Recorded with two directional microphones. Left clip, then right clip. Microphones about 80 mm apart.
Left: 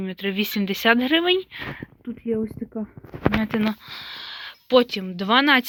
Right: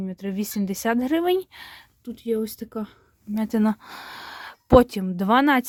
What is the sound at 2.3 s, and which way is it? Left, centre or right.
Speech, right.